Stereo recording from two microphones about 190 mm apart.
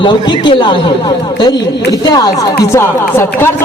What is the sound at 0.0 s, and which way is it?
A man's voice, 25° left (ahead or behind).